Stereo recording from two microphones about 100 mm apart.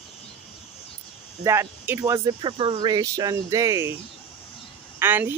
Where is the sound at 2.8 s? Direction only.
40° right (ahead or behind).